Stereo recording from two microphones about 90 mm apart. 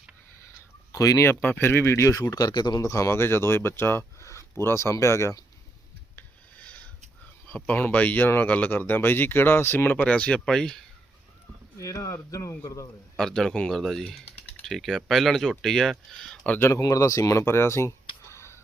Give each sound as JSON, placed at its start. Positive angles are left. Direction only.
{"t": 0.9, "sound": "speech", "side_deg": 40}
{"t": 1.3, "sound": "speech", "side_deg": 20}
{"t": 2.8, "sound": "speech", "side_deg": 35}
{"t": 6.1, "sound": "a sound", "side_deg": 15}
{"t": 7.4, "sound": "speech", "side_deg": 15}
{"t": 11.8, "sound": "speech", "side_deg": 35}
{"t": 13.1, "sound": "speech", "side_deg": 5}
{"t": 16.5, "sound": "speech", "side_deg": 25}
{"t": 16.8, "sound": "speech", "side_deg": 40}